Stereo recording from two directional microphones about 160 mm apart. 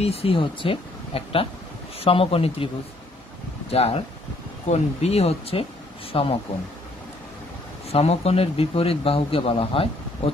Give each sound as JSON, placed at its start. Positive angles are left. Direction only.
{"t": 0.0, "sound": "a man's voice", "side_deg": 40}
{"t": 3.7, "sound": "a man's voice", "side_deg": 40}
{"t": 7.9, "sound": "a man's voice", "side_deg": 40}